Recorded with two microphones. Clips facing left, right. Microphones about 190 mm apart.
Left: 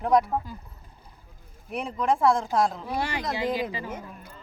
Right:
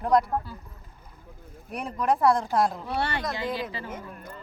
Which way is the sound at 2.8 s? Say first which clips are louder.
Even; 10° left (ahead or behind).